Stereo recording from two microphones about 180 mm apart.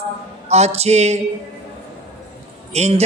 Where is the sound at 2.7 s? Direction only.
35° right (ahead or behind).